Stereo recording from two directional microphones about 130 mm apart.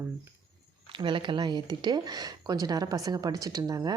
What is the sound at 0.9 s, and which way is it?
Speech, 40° right (ahead or behind).